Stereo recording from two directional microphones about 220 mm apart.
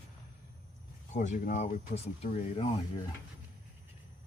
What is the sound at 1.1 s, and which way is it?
Speech, 35° left (ahead or behind).